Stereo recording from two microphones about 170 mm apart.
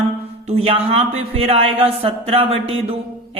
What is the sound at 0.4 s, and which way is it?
A man's voice, 35° right (ahead or behind).